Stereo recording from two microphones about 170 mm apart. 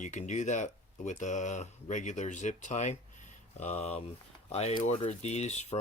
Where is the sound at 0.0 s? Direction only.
45° left (ahead or behind).